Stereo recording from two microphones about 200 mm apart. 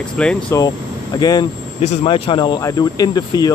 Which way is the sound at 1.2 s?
20° left (ahead or behind).